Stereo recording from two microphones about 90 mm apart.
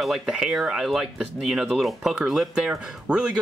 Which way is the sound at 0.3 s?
10° right (ahead or behind).